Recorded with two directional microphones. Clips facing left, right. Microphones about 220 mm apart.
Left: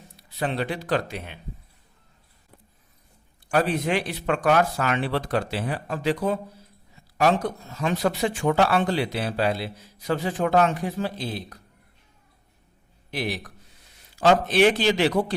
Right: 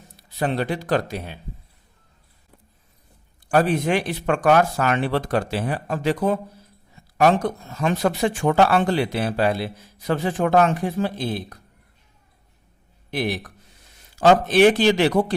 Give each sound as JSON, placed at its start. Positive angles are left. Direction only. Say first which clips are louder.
{"t": 0.2, "sound": "speech", "louder": "right 3 dB", "side_deg": -45}
{"t": 3.5, "sound": "speech", "louder": "right 4 dB", "side_deg": -45}
{"t": 7.8, "sound": "speech", "louder": "right 3 dB", "side_deg": -50}
{"t": 13.1, "sound": "speech", "louder": "right 4 dB", "side_deg": -50}